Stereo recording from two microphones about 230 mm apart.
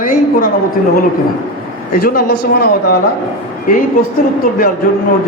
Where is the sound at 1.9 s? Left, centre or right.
Left.